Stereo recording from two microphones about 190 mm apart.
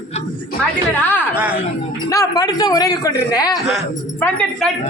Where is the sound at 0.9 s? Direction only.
10° left (ahead or behind).